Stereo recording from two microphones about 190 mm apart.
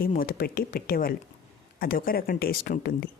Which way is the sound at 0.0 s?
50° left (ahead or behind).